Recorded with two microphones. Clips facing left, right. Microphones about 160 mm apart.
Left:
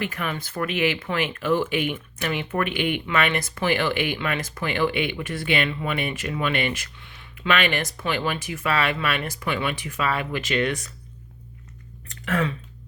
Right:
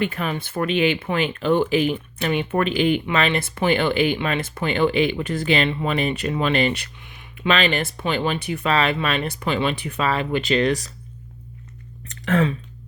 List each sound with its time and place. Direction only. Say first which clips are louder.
0.0 s speech: right 4 dB; 25° right (ahead or behind)
7.0 s speech: right 6 dB; 15° right (ahead or behind); by 10.9 s 35° right (ahead or behind)
12.2 s speech: right 5 dB; 30° right (ahead or behind)